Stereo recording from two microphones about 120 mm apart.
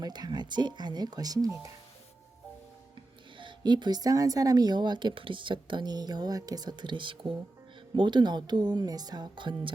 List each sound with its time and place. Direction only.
0.0 s speech: 35° right (ahead or behind)
3.3 s speech: 40° right (ahead or behind)